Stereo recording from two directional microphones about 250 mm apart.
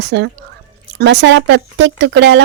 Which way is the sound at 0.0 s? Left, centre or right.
Right.